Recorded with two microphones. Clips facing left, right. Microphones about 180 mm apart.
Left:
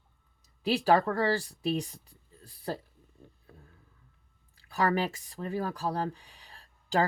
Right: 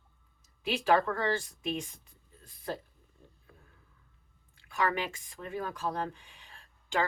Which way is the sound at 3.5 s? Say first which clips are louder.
Left 4 dB; 35° left (ahead or behind).